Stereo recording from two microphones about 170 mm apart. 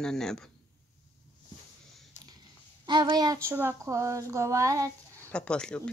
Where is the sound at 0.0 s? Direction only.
5° left (ahead or behind).